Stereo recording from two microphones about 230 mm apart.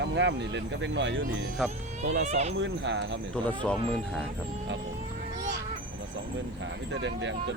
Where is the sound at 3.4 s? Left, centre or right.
Centre.